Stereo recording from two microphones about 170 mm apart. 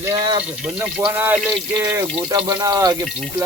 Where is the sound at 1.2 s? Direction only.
10° right (ahead or behind).